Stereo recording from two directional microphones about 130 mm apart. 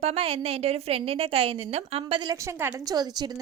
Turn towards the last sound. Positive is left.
turn(degrees=-30)  # may be behind; listen again after turning